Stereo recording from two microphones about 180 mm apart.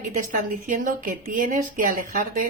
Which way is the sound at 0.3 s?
45° right (ahead or behind).